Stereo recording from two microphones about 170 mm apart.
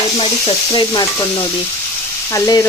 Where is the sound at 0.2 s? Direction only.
30° left (ahead or behind).